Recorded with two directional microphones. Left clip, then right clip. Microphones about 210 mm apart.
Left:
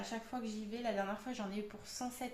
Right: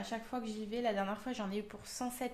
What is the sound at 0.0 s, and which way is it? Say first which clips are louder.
Speech: right 2 dB; 45° right (ahead or behind).